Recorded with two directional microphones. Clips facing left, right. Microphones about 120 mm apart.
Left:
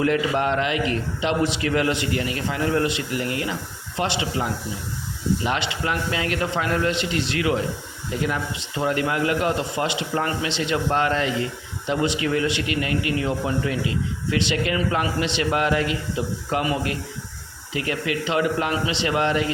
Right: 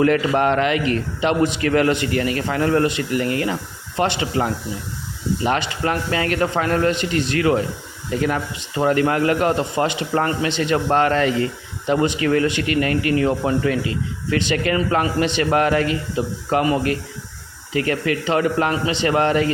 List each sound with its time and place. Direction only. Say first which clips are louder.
0.0 s a man's voice: right 4 dB; 55° right (ahead or behind)
5.5 s a man's voice: right 4 dB; 45° right (ahead or behind)